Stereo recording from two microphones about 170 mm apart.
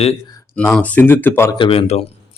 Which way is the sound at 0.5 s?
10° left (ahead or behind).